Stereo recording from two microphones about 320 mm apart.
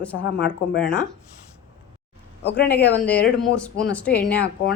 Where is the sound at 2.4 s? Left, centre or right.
Left.